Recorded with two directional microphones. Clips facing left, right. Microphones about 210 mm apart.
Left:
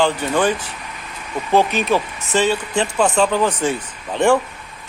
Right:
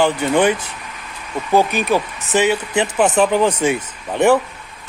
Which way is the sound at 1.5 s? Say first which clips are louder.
Right 1 dB; 15° right (ahead or behind).